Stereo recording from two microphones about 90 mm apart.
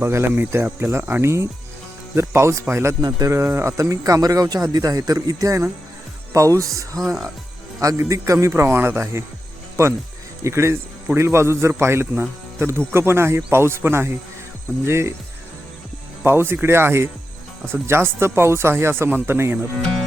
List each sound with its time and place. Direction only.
0.0 s speech: 30° right (ahead or behind)
7.0 s speech: centre (ahead or behind)
7.8 s speech: 40° right (ahead or behind)
10.4 s speech: 30° right (ahead or behind)
16.2 s speech: 25° right (ahead or behind)